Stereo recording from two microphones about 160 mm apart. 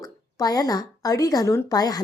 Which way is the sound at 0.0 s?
25° left (ahead or behind).